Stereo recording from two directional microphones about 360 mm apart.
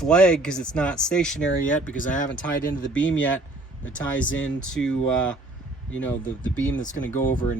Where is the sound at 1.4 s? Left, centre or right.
Left.